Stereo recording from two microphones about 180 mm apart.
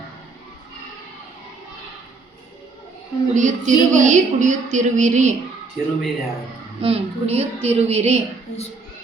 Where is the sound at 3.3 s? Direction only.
45° right (ahead or behind).